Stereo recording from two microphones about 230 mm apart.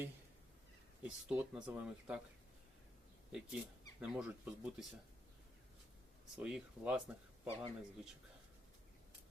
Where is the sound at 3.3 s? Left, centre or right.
Centre.